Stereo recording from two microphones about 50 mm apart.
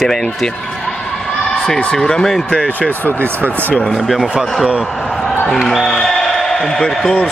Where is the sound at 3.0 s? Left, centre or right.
Left.